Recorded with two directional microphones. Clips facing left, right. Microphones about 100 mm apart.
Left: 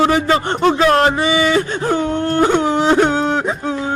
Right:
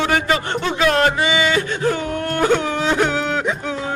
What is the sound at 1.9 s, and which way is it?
Speech, 30° left (ahead or behind).